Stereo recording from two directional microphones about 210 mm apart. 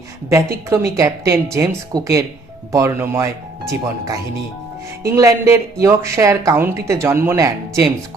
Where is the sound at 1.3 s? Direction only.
15° right (ahead or behind).